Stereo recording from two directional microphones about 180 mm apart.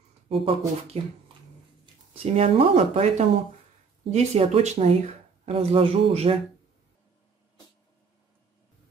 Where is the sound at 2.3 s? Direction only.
30° right (ahead or behind).